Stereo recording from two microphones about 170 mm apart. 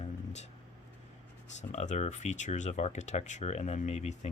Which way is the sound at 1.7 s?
40° left (ahead or behind).